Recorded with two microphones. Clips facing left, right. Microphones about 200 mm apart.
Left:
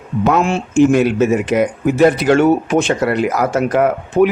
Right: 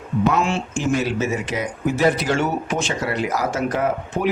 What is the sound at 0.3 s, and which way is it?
Speech, 50° left (ahead or behind).